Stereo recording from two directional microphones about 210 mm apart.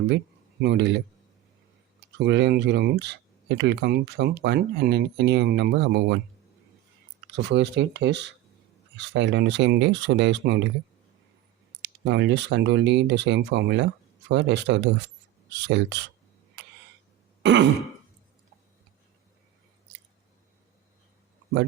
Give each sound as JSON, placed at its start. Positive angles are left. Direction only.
{"t": 0.6, "sound": "speech", "side_deg": -55}
{"t": 2.1, "sound": "speech", "side_deg": -55}
{"t": 7.3, "sound": "speech", "side_deg": -55}
{"t": 11.8, "sound": "speech", "side_deg": -55}
{"t": 16.6, "sound": "a sound", "side_deg": -55}
{"t": 17.4, "sound": "throat clearing", "side_deg": -55}